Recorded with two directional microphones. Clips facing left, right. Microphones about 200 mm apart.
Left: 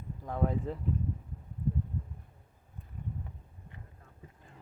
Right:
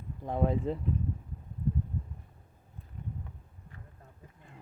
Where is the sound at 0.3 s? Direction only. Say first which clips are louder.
Right 3 dB; 25° right (ahead or behind).